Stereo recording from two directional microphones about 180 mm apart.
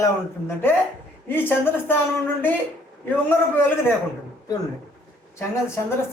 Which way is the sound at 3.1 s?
10° left (ahead or behind).